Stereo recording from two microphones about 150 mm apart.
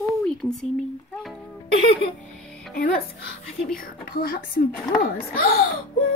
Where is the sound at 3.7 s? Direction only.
75° left (ahead or behind).